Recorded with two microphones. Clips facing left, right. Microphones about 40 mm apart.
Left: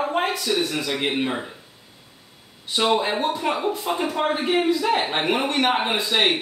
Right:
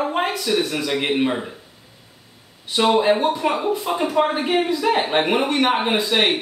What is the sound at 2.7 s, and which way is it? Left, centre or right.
Speech, centre.